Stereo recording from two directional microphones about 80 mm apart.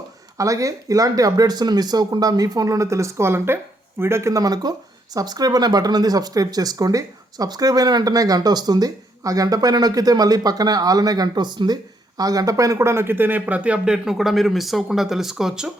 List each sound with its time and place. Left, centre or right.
0.3 s speech: right; by 15.7 s centre